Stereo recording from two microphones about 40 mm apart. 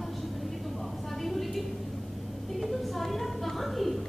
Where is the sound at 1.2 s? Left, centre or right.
Centre.